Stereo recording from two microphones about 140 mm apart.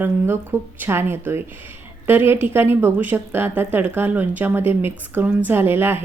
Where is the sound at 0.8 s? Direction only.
15° right (ahead or behind).